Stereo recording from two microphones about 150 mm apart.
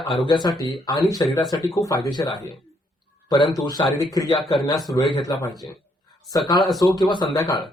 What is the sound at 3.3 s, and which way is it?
A man's voice, 30° left (ahead or behind).